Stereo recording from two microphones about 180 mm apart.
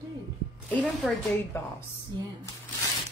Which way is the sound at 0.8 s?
Centre (ahead or behind).